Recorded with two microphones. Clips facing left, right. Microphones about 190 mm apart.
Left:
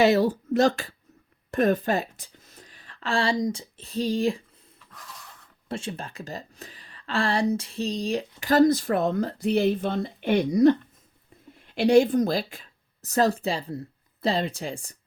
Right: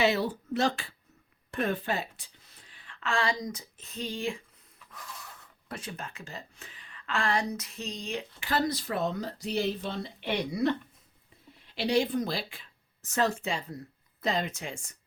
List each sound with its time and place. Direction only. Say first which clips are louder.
0.0 s a woman's voice: left 7 dB; 40° left (ahead or behind)
5.6 s speech: left 7 dB; 25° left (ahead or behind)